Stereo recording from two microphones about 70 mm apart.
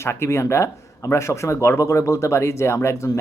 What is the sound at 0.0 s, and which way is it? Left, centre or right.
Speech, left.